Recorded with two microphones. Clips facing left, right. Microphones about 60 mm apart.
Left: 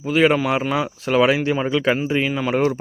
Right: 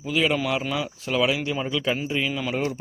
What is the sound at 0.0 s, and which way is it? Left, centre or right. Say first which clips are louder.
Speech: left 7 dB; left.